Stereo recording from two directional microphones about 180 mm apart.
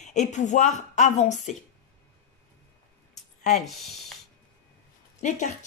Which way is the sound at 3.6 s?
Centre (ahead or behind).